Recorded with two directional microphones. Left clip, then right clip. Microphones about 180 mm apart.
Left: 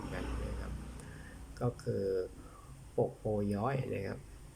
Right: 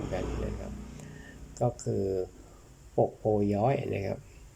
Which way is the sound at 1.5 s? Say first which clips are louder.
Right 6 dB; 20° right (ahead or behind).